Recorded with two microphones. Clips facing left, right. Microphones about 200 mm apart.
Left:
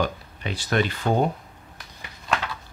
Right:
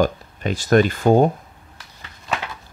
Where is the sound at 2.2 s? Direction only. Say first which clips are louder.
Even; 5° right (ahead or behind).